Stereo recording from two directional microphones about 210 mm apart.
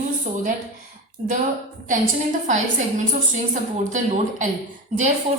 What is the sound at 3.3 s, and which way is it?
A woman's voice, 35° right (ahead or behind).